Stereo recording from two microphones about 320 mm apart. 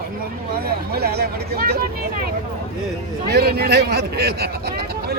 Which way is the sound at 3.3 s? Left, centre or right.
Right.